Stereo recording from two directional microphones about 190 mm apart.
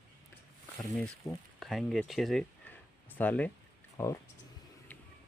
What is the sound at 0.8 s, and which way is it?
Speech, centre (ahead or behind).